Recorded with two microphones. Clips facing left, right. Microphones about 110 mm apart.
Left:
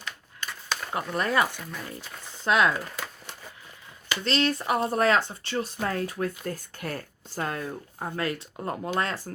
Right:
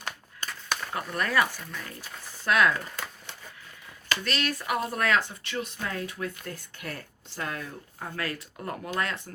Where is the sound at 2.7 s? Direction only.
10° left (ahead or behind).